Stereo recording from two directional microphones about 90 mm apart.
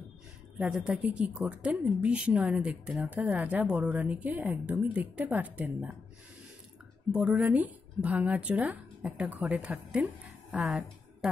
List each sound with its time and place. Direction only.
0.6 s a woman's voice: 10° right (ahead or behind)
7.1 s a woman's voice: 10° right (ahead or behind)